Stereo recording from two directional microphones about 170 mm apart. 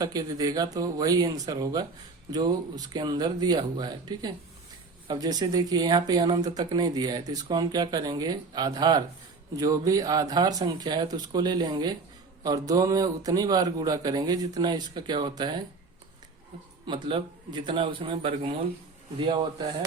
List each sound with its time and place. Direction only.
0.0 s speech: 20° right (ahead or behind)
16.8 s speech: 30° right (ahead or behind)